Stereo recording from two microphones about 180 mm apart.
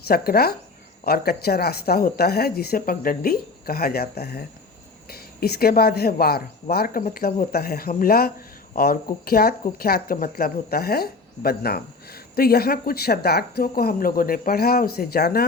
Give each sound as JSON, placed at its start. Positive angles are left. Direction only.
{"t": 0.1, "sound": "a woman's voice", "side_deg": 60}